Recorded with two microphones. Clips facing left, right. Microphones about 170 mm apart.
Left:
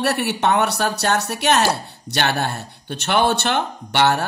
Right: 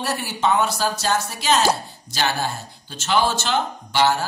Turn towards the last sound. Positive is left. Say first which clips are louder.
# left 1 dB
turn(degrees=65)  # may be behind; listen again after turning